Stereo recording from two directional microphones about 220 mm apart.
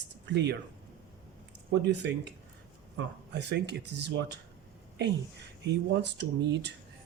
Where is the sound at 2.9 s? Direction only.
50° right (ahead or behind).